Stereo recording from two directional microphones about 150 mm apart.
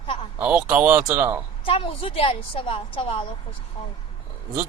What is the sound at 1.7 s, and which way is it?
A woman's voice, 35° left (ahead or behind).